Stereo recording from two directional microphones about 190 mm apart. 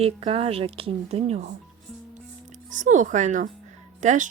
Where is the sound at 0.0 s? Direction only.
30° right (ahead or behind).